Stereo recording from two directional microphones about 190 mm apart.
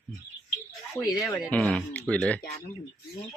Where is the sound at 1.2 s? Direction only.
5° left (ahead or behind).